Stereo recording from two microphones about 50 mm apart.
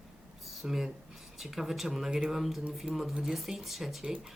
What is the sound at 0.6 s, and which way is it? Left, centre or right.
Speech, centre.